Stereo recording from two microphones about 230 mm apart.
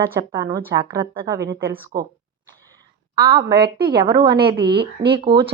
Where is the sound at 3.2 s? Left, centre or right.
Centre.